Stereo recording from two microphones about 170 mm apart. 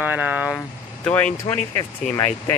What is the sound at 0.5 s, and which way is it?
Speech, 10° left (ahead or behind).